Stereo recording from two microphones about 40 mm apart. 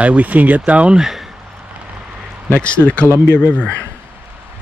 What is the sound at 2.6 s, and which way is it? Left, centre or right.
Speech, left.